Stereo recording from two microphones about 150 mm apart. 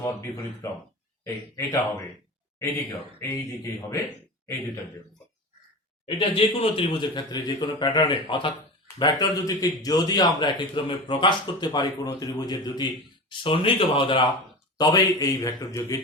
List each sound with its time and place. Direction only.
0.0 s a man's voice: 20° left (ahead or behind)
3.2 s a man's voice: 20° left (ahead or behind)
6.1 s a man's voice: 40° left (ahead or behind)
14.8 s a man's voice: 25° left (ahead or behind)